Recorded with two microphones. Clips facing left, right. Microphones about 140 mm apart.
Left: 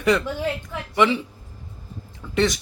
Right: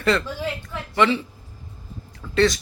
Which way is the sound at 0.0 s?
15° left (ahead or behind).